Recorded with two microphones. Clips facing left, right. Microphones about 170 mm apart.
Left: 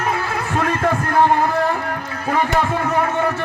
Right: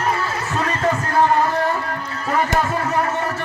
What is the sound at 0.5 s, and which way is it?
Heart murmur, 55° left (ahead or behind).